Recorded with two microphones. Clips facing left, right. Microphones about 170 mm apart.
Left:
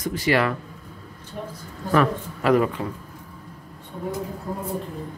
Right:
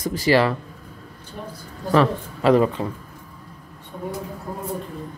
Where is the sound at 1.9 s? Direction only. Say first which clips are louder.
Right 2 dB; 30° right (ahead or behind).